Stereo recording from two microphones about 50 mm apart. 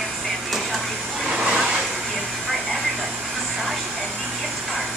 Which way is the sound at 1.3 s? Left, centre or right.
Centre.